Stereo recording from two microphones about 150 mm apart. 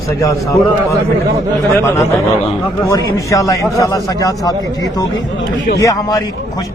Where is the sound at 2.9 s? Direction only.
20° left (ahead or behind).